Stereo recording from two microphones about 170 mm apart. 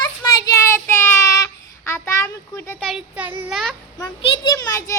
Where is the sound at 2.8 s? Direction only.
Centre (ahead or behind).